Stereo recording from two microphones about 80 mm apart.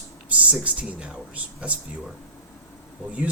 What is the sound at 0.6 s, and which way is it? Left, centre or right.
Speech, centre.